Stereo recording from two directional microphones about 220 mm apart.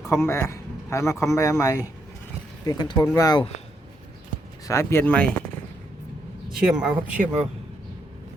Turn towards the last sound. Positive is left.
turn(degrees=-5)  # may be behind; listen again after turning